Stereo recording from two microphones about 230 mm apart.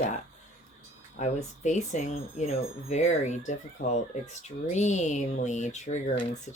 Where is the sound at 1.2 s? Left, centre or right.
Left.